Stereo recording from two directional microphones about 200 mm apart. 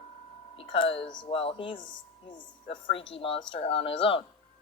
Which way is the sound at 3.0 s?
25° left (ahead or behind).